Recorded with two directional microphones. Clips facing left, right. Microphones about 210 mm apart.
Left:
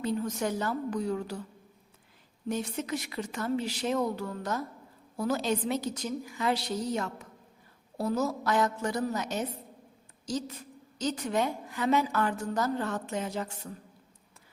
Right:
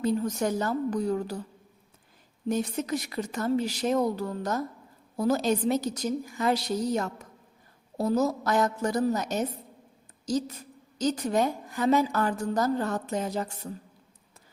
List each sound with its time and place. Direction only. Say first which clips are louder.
0.0 s a woman's voice: right 4 dB; 40° right (ahead or behind)
2.5 s a woman's voice: right 4 dB; 40° right (ahead or behind)